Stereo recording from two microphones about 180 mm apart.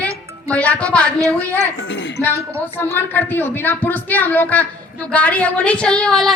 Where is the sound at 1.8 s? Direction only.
90° left.